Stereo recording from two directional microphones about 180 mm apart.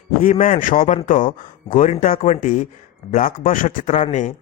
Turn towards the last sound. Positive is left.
turn(degrees=45)  # may be behind; listen again after turning